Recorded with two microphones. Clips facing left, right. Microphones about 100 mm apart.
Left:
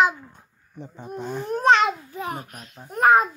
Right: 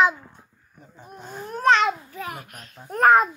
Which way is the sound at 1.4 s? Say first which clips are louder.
Left 1 dB; 25° left (ahead or behind).